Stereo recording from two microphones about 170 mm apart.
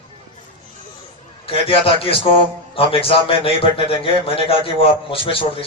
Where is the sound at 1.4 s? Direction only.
30° left (ahead or behind).